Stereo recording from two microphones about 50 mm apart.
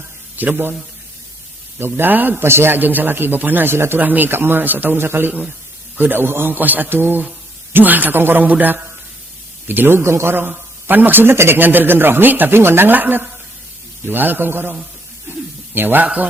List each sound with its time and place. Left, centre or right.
0.4 s a man's voice: right
1.8 s a man's voice: right
2.4 s speech: right
2.7 s a man's voice: right
4.0 s a man's voice: right
4.9 s a man's voice: right
9.6 s speech: right
10.8 s speech: right
12.5 s speech: right
12.9 s a man's voice: right
15.3 s a sound: right